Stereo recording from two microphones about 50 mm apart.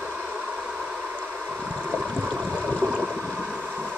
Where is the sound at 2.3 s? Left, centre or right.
Left.